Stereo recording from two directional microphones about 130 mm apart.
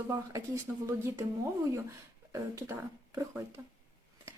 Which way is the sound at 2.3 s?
20° right (ahead or behind).